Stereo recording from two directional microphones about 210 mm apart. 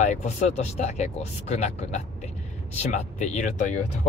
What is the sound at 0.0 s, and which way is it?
Speech, 35° left (ahead or behind).